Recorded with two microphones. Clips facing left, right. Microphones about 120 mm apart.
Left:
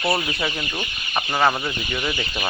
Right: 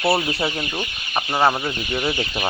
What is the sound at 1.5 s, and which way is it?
Speech, 20° right (ahead or behind).